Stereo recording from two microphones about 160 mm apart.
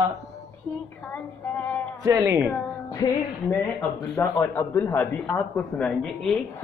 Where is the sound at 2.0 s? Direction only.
20° right (ahead or behind).